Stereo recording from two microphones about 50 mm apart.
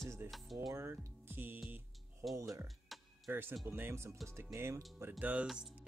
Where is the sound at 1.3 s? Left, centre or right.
Right.